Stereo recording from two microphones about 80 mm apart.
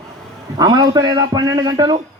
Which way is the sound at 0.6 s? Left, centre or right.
Right.